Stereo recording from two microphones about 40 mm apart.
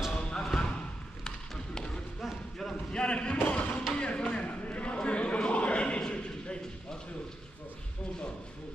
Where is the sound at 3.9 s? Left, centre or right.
Left.